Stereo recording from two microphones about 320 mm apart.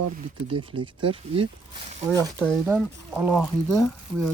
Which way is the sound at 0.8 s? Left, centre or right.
Right.